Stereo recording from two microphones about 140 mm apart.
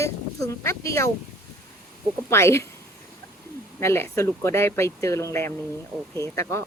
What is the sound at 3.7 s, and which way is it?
Speech, 15° left (ahead or behind).